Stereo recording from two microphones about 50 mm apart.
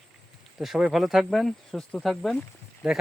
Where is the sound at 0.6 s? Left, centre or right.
Centre.